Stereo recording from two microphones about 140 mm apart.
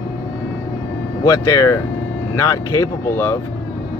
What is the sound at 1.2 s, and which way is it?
Speech, 25° left (ahead or behind).